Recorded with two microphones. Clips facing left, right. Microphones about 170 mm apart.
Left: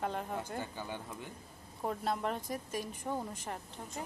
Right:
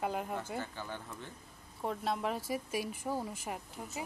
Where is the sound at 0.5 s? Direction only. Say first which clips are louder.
Even; 15° left (ahead or behind).